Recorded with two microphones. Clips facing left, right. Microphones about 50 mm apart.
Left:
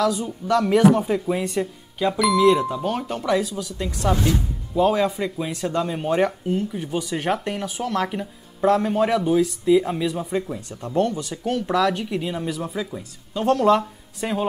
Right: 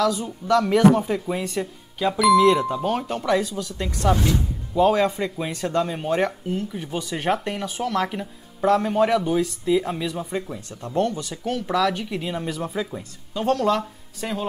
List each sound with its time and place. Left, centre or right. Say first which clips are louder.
0.0 s speech: even; centre
11.0 s speech: left 1 dB; left
11.4 s speech: left 1 dB; centre
13.3 s speech: left 3 dB; centre